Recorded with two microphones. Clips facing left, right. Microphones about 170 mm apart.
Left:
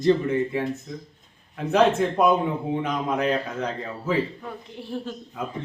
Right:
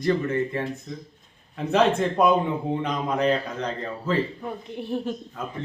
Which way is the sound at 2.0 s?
Centre (ahead or behind).